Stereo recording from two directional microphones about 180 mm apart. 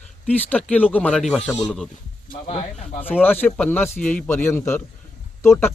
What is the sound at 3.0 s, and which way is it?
Speech, 10° left (ahead or behind).